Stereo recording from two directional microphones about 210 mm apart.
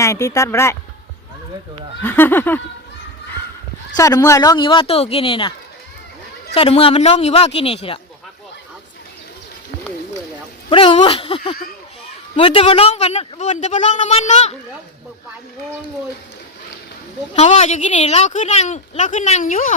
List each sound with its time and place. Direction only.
0.0 s speech: 15° left (ahead or behind)
2.0 s speech: 10° left (ahead or behind)
3.9 s speech: 15° left (ahead or behind)
10.7 s speech: 25° left (ahead or behind)
17.3 s speech: 30° left (ahead or behind)